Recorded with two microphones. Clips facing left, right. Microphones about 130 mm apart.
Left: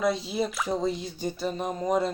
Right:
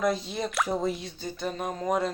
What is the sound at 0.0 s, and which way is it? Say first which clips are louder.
Speech: left 1 dB; centre (ahead or behind).